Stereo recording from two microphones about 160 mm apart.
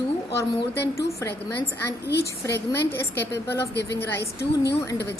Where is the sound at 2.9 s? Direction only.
15° left (ahead or behind).